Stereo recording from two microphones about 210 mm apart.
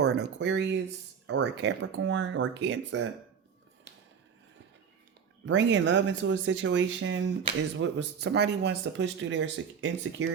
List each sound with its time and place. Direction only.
0.0 s speech: 50° right (ahead or behind)
5.5 s speech: 60° right (ahead or behind)